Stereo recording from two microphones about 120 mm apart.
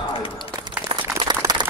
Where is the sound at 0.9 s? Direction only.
40° right (ahead or behind).